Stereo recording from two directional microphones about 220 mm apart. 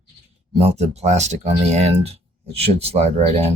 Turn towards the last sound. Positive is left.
turn(degrees=-30)  # may be behind; listen again after turning